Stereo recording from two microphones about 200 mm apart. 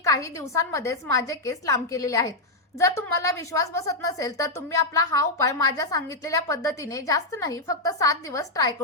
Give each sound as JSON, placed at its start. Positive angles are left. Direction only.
{"t": 0.0, "sound": "a woman's voice", "side_deg": 15}